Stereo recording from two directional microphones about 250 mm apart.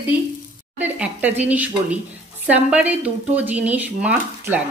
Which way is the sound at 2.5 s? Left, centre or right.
Centre.